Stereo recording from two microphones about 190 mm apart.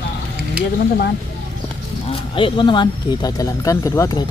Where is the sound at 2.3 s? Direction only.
25° left (ahead or behind).